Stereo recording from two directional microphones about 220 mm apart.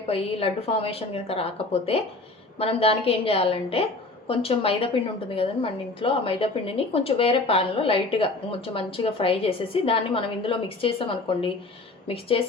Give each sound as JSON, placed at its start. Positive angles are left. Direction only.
{"t": 0.1, "sound": "a woman's voice", "side_deg": 25}
{"t": 2.6, "sound": "a woman's voice", "side_deg": 25}